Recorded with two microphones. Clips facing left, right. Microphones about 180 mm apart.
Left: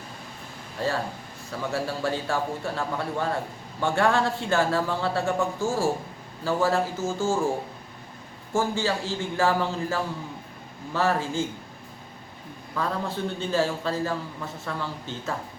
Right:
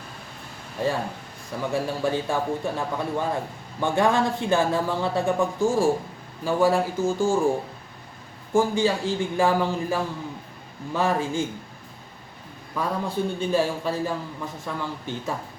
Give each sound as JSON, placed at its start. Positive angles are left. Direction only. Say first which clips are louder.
{"t": 0.8, "sound": "speech", "louder": "right 2 dB", "side_deg": -15}
{"t": 8.5, "sound": "speech", "louder": "right 4 dB", "side_deg": -15}
{"t": 12.7, "sound": "speech", "louder": "right 2 dB", "side_deg": -15}